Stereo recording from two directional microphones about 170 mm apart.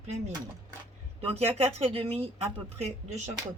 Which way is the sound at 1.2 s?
35° right (ahead or behind).